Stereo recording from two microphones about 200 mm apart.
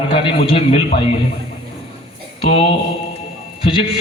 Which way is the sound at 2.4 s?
30° left (ahead or behind).